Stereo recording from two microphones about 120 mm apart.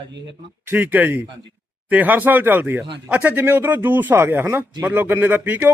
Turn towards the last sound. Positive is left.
turn(degrees=-15)  # may be behind; listen again after turning